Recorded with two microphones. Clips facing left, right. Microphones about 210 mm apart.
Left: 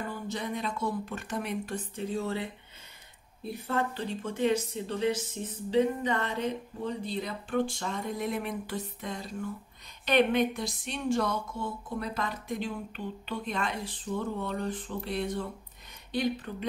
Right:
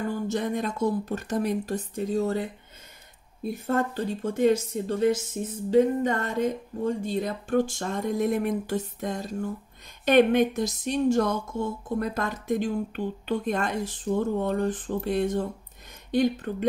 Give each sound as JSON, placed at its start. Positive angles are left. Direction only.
{"t": 0.3, "sound": "speech", "side_deg": -45}
{"t": 3.6, "sound": "speech", "side_deg": -45}